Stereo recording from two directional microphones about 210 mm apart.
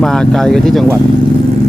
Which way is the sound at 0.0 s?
Centre (ahead or behind).